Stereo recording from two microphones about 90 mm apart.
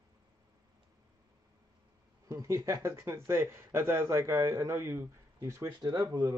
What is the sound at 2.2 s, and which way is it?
A man's voice, 30° right (ahead or behind).